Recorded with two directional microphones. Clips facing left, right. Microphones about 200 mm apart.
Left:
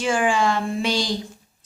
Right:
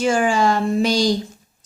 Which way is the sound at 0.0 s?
40° right (ahead or behind).